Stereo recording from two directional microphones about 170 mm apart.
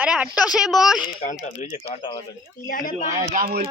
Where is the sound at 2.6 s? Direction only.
55° left (ahead or behind).